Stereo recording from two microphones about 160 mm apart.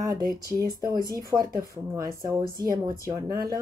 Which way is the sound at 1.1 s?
25° right (ahead or behind).